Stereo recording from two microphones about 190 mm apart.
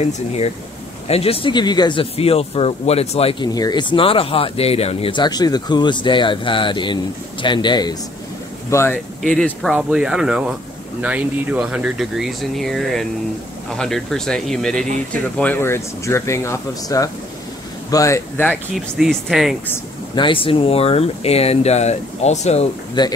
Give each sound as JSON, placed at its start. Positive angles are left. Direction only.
{"t": 1.0, "sound": "speech", "side_deg": 30}
{"t": 8.6, "sound": "speech", "side_deg": 15}
{"t": 18.9, "sound": "speech", "side_deg": 0}
{"t": 20.2, "sound": "speech", "side_deg": 25}
{"t": 23.0, "sound": "speech", "side_deg": 25}